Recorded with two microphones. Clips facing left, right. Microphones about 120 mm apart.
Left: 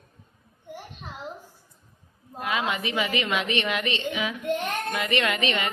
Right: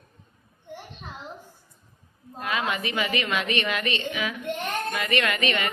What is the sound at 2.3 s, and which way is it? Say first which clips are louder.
A woman's voice: left 1 dB; 15° left (ahead or behind).